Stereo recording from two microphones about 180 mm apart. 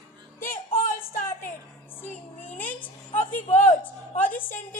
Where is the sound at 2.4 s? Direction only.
10° left (ahead or behind).